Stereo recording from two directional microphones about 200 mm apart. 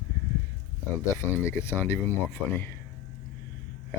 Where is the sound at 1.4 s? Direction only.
10° left (ahead or behind).